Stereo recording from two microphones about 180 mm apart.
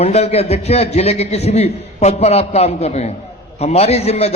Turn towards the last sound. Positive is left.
turn(degrees=35)  # may be behind; listen again after turning